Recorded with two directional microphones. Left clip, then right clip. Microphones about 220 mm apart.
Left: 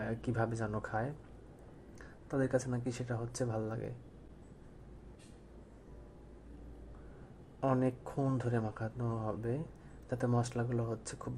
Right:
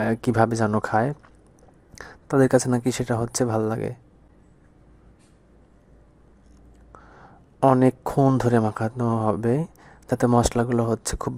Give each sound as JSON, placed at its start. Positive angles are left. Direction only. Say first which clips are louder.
{"t": 0.0, "sound": "speech", "louder": "right 16 dB", "side_deg": -40}
{"t": 7.6, "sound": "speech", "louder": "right 15 dB", "side_deg": -40}